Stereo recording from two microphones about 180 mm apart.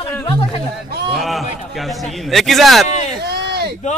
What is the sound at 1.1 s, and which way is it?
Speech, centre (ahead or behind).